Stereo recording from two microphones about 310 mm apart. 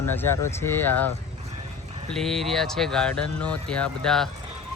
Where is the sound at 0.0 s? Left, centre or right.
Centre.